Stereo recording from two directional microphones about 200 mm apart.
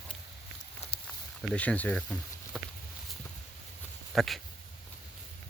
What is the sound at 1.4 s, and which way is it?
Speech, 5° left (ahead or behind).